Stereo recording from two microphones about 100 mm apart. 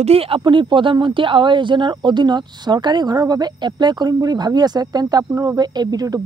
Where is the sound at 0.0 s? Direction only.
80° right.